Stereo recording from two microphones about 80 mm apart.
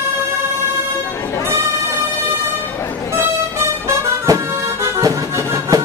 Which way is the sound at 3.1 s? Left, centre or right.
Right.